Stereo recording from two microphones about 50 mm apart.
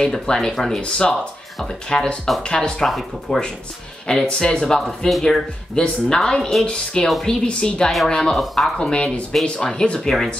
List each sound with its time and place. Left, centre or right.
0.0 s speech: centre
2.9 s speech: centre
4.1 s speech: centre
9.3 s speech: centre